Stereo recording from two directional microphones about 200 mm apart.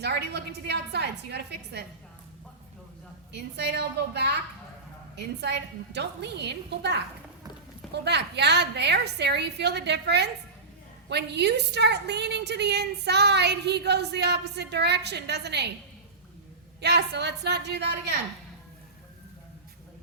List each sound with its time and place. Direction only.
0.0 s a woman's voice: 55° right (ahead or behind)
3.3 s a woman's voice: 60° right (ahead or behind)
8.0 s a woman's voice: 55° right (ahead or behind)
16.8 s a woman's voice: 55° right (ahead or behind)